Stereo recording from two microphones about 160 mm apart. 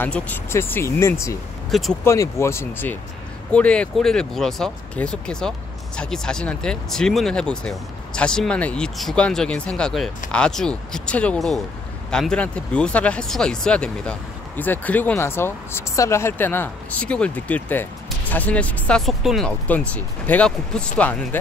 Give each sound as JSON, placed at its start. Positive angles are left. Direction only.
{"t": 0.0, "sound": "speech", "side_deg": 10}
{"t": 1.7, "sound": "speech", "side_deg": 0}
{"t": 2.0, "sound": "speech", "side_deg": 15}